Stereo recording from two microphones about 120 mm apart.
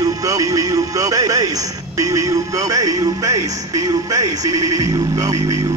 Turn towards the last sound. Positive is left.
turn(degrees=-30)  # may be behind; listen again after turning